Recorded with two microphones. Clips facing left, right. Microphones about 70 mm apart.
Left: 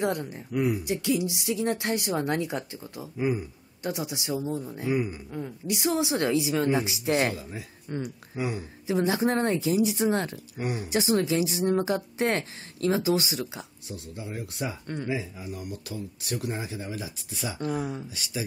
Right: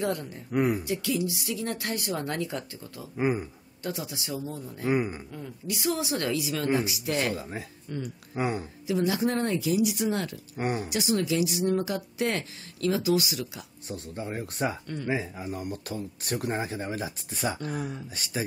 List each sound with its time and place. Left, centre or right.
0.0 s a woman's voice: left
0.5 s speech: right
0.8 s a woman's voice: left
3.2 s speech: right
3.8 s a woman's voice: centre
4.8 s speech: right
5.3 s a woman's voice: left
7.3 s speech: right
7.9 s speech: left
8.4 s speech: right
8.8 s speech: left
10.6 s speech: right
10.9 s speech: left
13.8 s speech: right